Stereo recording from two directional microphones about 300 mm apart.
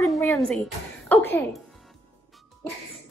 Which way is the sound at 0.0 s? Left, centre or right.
Centre.